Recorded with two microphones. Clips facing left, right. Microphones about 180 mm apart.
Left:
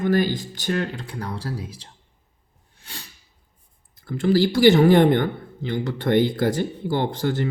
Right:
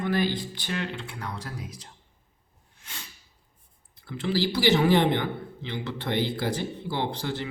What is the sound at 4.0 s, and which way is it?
Speech, 45° left (ahead or behind).